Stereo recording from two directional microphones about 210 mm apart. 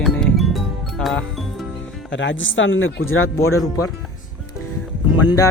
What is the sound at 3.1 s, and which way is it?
Speech, 75° left (ahead or behind).